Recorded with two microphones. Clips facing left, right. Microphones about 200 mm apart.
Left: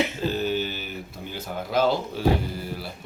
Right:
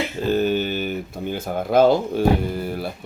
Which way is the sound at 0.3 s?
55° right (ahead or behind).